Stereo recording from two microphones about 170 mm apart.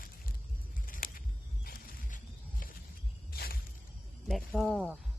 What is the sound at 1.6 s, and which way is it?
Music, 60° left (ahead or behind).